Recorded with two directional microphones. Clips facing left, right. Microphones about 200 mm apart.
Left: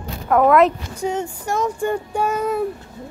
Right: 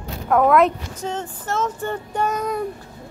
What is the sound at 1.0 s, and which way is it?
Speech, 15° left (ahead or behind).